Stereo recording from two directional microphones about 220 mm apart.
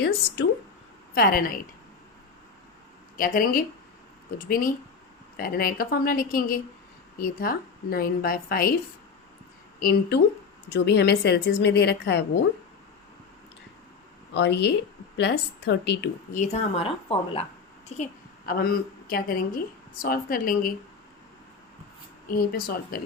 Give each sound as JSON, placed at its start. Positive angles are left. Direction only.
{"t": 1.1, "sound": "a woman's voice", "side_deg": 40}
{"t": 3.2, "sound": "a woman's voice", "side_deg": 40}
{"t": 9.8, "sound": "a woman's voice", "side_deg": 45}
{"t": 14.3, "sound": "a woman's voice", "side_deg": 50}
{"t": 16.3, "sound": "a woman's voice", "side_deg": 30}
{"t": 22.3, "sound": "a woman's voice", "side_deg": 40}